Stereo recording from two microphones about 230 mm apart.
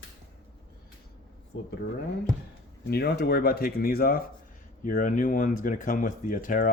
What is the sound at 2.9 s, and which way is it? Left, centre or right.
Speech, left.